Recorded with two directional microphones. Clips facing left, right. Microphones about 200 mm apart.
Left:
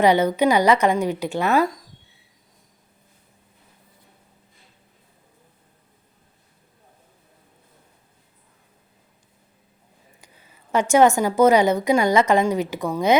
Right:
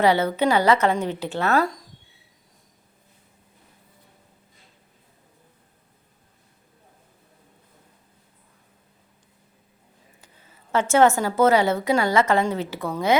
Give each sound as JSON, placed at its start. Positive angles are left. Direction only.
{"t": 0.0, "sound": "a woman's voice", "side_deg": 15}
{"t": 10.2, "sound": "a woman's voice", "side_deg": 15}